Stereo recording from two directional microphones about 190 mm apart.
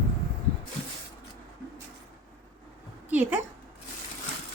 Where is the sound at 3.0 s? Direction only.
10° right (ahead or behind).